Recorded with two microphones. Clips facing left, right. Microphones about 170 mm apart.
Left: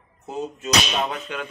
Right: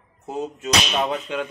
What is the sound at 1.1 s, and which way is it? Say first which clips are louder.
Speech: right 5 dB; 25° right (ahead or behind).